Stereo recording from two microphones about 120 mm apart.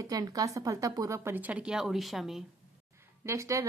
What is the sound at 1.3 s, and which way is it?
A woman's voice, 10° right (ahead or behind).